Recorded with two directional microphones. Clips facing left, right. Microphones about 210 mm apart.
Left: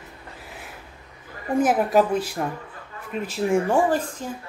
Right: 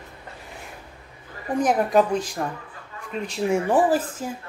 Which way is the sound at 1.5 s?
5° left (ahead or behind).